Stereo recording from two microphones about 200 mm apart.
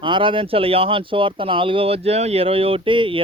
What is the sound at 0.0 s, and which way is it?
Speech, 25° right (ahead or behind).